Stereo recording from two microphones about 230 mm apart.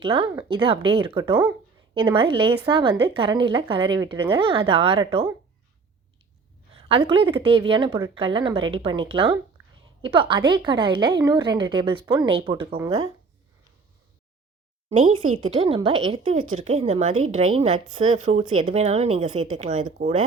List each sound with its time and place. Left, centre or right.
0.0 s a woman's voice: right
6.7 s a woman's voice: right
14.8 s a woman's voice: right